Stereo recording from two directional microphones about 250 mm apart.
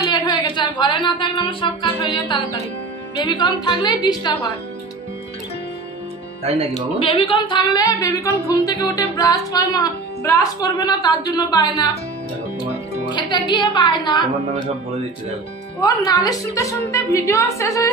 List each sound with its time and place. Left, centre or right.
0.0 s music: centre
3.3 s a woman's voice: centre
6.7 s a woman's voice: left
13.1 s a woman's voice: centre
15.8 s a woman's voice: centre